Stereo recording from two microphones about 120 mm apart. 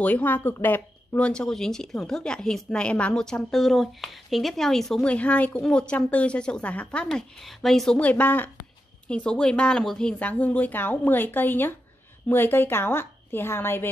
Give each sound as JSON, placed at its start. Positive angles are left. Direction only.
{"t": 0.0, "sound": "a woman's voice", "side_deg": 15}